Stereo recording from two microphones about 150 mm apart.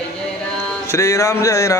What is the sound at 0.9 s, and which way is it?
Speech, 20° left (ahead or behind).